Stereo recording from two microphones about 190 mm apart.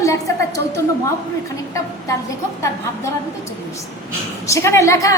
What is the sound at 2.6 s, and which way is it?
A woman's voice, 15° left (ahead or behind).